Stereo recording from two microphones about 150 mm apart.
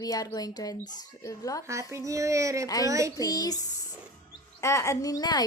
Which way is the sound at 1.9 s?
20° right (ahead or behind).